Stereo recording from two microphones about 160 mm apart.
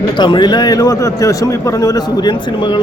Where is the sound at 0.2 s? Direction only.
30° left (ahead or behind).